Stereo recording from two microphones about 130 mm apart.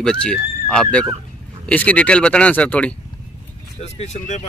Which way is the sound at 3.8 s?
55° left (ahead or behind).